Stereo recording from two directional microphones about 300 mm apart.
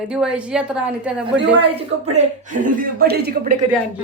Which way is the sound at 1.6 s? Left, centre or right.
Right.